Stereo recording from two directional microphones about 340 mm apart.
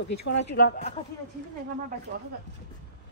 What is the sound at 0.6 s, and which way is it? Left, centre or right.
Speech, left.